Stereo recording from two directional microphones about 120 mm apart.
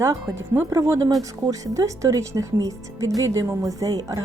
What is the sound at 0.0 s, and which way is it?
A woman's voice, 25° right (ahead or behind).